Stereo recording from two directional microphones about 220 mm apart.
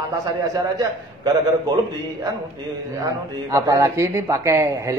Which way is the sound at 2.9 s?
15° right (ahead or behind).